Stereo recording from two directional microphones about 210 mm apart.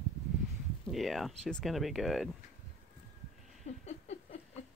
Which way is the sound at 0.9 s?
Centre (ahead or behind).